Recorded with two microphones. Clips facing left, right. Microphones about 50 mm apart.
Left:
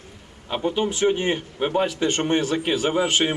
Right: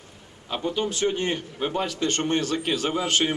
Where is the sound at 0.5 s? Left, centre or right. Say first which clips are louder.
Left 3 dB; centre.